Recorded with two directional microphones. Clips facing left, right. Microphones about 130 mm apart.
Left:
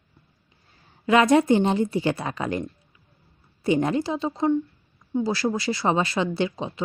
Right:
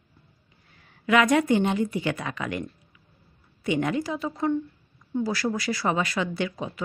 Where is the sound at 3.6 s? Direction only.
35° left (ahead or behind).